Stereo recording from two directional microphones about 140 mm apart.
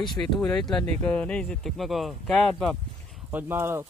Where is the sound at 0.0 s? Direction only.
5° left (ahead or behind).